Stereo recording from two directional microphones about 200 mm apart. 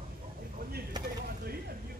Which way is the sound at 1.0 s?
20° right (ahead or behind).